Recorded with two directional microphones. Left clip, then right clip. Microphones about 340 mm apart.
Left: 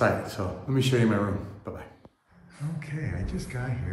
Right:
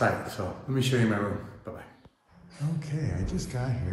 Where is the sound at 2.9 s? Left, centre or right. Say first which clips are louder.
Even; centre.